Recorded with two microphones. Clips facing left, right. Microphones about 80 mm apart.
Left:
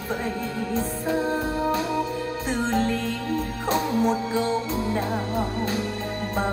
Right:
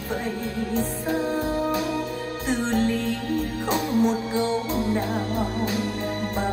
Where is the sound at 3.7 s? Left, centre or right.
Left.